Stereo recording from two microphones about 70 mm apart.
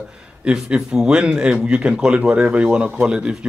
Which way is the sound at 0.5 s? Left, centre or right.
Centre.